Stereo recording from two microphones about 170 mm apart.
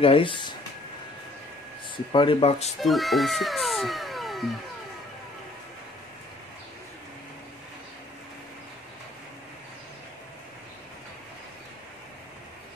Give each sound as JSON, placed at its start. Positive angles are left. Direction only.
{"t": 0.0, "sound": "speech", "side_deg": 30}
{"t": 2.1, "sound": "speech", "side_deg": 35}
{"t": 2.8, "sound": "speech", "side_deg": 0}